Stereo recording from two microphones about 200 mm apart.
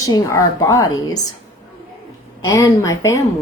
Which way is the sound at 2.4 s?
15° left (ahead or behind).